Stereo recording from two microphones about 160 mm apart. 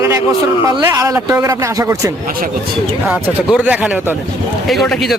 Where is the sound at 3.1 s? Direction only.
10° right (ahead or behind).